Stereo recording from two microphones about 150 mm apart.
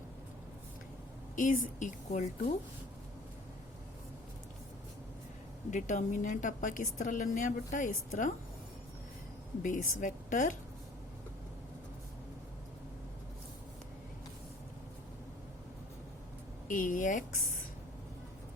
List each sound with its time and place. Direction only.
1.4 s a woman's voice: 60° left (ahead or behind)
5.7 s a woman's voice: 55° left (ahead or behind)
9.6 s a woman's voice: 60° left (ahead or behind)
16.6 s a woman's voice: 60° left (ahead or behind)